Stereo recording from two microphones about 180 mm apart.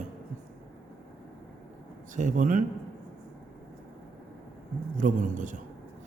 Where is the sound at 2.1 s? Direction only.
45° right (ahead or behind).